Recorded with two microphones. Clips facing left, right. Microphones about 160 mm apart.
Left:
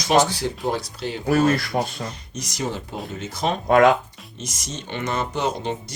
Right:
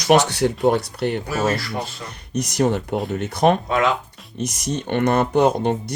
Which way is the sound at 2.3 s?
65° right (ahead or behind).